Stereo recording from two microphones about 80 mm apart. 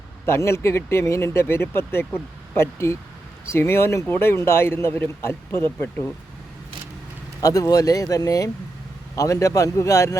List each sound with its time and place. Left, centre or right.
0.3 s a man's voice: left
7.4 s speech: left